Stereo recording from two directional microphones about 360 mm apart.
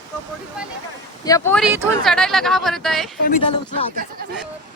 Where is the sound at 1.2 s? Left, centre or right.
Centre.